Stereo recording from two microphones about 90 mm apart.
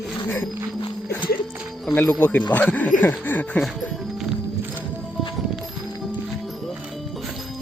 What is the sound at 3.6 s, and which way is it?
Music, centre (ahead or behind).